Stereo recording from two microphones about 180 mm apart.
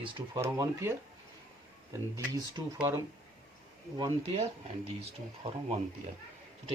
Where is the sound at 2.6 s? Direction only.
20° right (ahead or behind).